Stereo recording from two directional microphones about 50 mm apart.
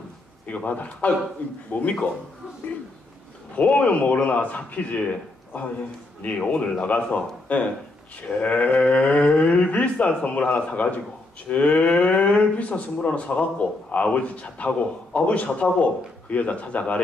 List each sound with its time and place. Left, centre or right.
0.7 s a man's voice: left
3.5 s a man's voice: left